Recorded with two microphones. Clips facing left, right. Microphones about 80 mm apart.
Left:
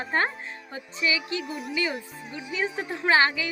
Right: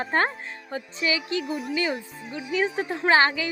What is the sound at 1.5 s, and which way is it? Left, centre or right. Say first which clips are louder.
Speech: right 4 dB; centre.